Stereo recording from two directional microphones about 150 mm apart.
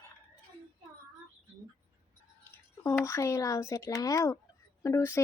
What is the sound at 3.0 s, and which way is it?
Speech, 20° left (ahead or behind).